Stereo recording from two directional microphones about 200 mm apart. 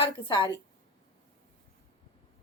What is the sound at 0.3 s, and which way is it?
Speech, 25° left (ahead or behind).